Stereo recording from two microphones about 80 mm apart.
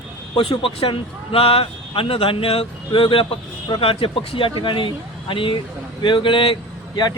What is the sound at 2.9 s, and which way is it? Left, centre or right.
Speech, left.